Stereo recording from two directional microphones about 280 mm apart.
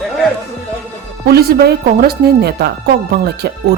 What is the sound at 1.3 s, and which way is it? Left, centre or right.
Speech, right.